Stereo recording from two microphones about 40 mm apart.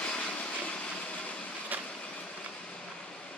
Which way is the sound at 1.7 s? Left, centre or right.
Right.